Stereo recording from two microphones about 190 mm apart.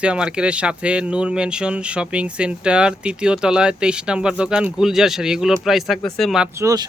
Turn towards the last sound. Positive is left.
turn(degrees=-20)  # may be behind; listen again after turning